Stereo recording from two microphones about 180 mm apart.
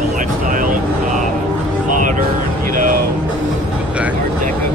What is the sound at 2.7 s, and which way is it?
Music, 50° right (ahead or behind).